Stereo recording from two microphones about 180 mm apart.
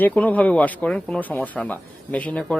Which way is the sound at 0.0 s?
10° left (ahead or behind).